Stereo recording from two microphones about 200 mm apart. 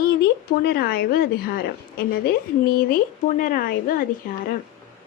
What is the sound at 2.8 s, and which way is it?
Speech, 45° left (ahead or behind).